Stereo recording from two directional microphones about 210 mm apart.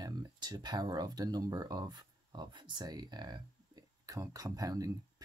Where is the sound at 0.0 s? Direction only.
20° right (ahead or behind).